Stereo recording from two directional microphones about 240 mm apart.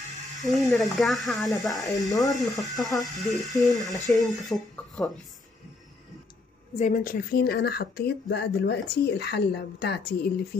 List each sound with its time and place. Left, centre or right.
0.4 s speech: centre
1.9 s speech: centre
2.3 s speech: centre
6.8 s speech: left